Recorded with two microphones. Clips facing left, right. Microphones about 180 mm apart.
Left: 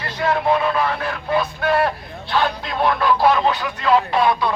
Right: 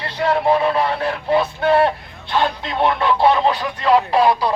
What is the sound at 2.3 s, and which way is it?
Speech, 20° right (ahead or behind).